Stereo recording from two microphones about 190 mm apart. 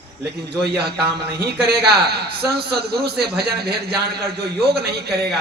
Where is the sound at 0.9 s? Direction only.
60° right (ahead or behind).